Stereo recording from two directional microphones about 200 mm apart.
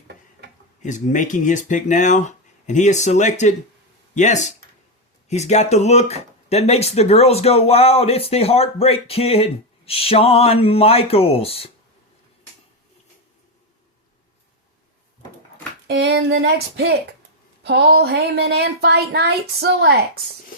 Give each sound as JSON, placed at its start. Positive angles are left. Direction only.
{"t": 0.8, "sound": "speech", "side_deg": 35}
{"t": 15.9, "sound": "speech", "side_deg": -55}